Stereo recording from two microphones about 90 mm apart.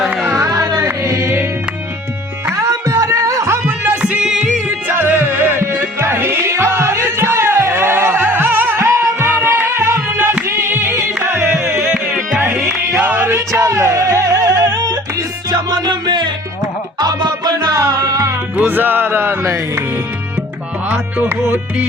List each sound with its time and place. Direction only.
0.1 s music: 15° right (ahead or behind)
0.3 s music: 35° right (ahead or behind)
2.6 s music: 35° right (ahead or behind)
3.7 s music: 15° right (ahead or behind)
4.9 s music: 25° right (ahead or behind)
12.9 s music: 20° right (ahead or behind)
13.5 s music: 35° right (ahead or behind); by 16.3 s 55° right (ahead or behind)
17.0 s music: 45° right (ahead or behind)
18.5 s music: 20° right (ahead or behind)
20.9 s music: 20° right (ahead or behind)